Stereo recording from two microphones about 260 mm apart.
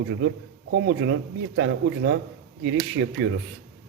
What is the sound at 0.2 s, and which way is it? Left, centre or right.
Speech, right.